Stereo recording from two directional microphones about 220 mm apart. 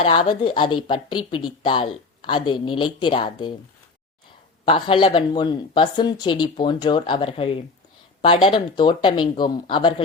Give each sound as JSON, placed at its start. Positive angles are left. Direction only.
{"t": 0.0, "sound": "a woman's voice", "side_deg": 25}
{"t": 4.6, "sound": "a woman's voice", "side_deg": 25}